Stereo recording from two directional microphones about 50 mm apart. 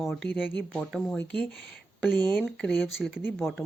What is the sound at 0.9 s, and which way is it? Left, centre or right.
Speech, centre.